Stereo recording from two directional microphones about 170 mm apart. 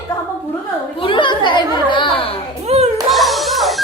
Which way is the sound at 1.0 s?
30° left (ahead or behind).